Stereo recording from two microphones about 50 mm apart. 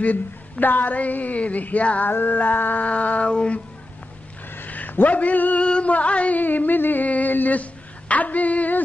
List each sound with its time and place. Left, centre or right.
0.0 s speech: left
2.0 s speech: left
3.3 s a sound: centre
4.6 s a man's voice: left
8.1 s female singing: left